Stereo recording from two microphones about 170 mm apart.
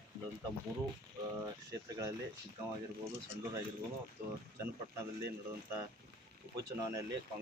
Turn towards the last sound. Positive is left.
turn(degrees=-15)  # may be behind; listen again after turning